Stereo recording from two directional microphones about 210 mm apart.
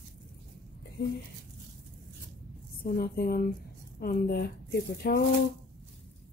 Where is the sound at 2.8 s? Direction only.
45° left (ahead or behind).